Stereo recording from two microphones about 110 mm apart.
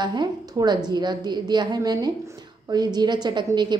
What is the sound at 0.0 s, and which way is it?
A woman's voice, 40° right (ahead or behind).